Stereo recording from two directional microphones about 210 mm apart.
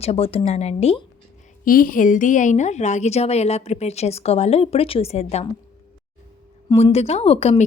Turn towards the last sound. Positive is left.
turn(degrees=30)  # may be behind; listen again after turning